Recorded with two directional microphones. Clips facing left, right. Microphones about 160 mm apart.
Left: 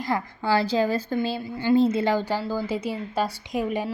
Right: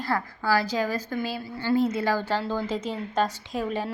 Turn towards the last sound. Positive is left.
turn(degrees=15)  # may be behind; listen again after turning